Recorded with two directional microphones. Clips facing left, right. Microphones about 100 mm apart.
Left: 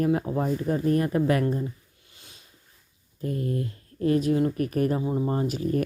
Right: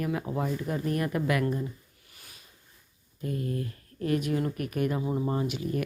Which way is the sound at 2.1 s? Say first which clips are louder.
Left 1 dB; 25° left (ahead or behind).